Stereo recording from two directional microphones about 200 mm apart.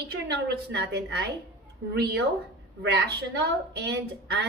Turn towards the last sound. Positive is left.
turn(degrees=-55)  # may be behind; listen again after turning